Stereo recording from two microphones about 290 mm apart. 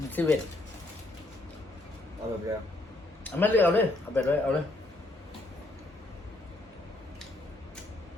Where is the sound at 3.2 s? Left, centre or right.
Centre.